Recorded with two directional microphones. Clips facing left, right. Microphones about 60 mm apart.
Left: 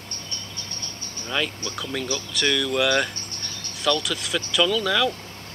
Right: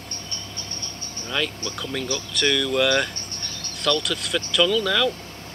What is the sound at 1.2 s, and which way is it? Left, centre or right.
Speech, centre.